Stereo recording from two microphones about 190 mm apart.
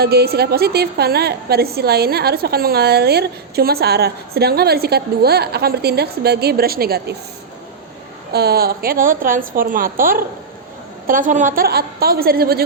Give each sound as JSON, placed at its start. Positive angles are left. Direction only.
{"t": 0.0, "sound": "a woman's voice", "side_deg": -55}
{"t": 8.3, "sound": "a woman's voice", "side_deg": -55}